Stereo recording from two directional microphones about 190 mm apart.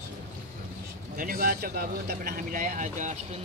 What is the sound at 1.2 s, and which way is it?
Speech, 50° right (ahead or behind).